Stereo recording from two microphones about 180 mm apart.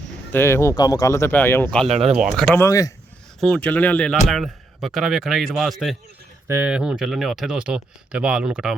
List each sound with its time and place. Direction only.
0.3 s speech: 15° left (ahead or behind)
1.9 s speech: 35° right (ahead or behind)
2.1 s speech: centre (ahead or behind)
2.6 s speech: 20° left (ahead or behind)
3.4 s speech: 5° left (ahead or behind)